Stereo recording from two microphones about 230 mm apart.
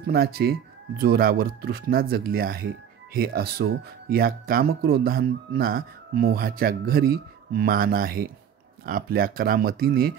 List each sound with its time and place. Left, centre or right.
0.0 s speech: right